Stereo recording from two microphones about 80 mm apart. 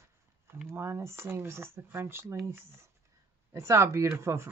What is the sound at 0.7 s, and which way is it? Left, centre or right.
Speech, right.